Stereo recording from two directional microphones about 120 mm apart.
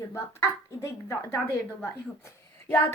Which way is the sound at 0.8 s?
25° left (ahead or behind).